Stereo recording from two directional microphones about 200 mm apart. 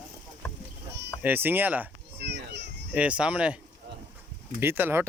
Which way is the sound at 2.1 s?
55° right (ahead or behind).